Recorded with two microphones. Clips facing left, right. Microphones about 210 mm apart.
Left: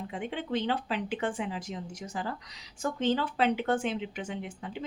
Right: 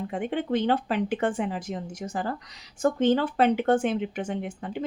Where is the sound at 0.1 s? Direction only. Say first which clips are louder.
Right 6 dB; 50° right (ahead or behind).